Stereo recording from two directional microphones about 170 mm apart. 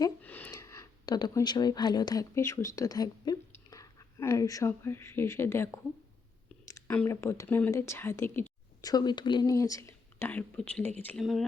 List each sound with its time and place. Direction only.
0.2 s speech: 10° left (ahead or behind)
6.7 s a sound: 20° left (ahead or behind)
6.9 s speech: 10° left (ahead or behind)